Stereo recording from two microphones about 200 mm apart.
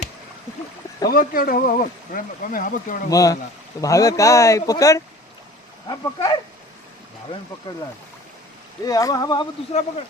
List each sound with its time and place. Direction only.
1.1 s speech: 45° left (ahead or behind)
3.1 s speech: 15° left (ahead or behind)
8.8 s speech: 20° left (ahead or behind)